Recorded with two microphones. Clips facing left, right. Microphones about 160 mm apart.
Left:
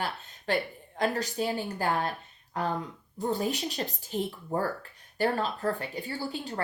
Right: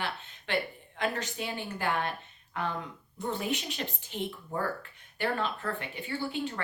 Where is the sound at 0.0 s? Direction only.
40° left (ahead or behind).